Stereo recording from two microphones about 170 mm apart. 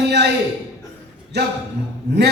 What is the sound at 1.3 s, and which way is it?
Speech, 80° right.